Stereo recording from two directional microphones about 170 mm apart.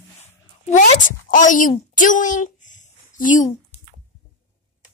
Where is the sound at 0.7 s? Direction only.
50° left (ahead or behind).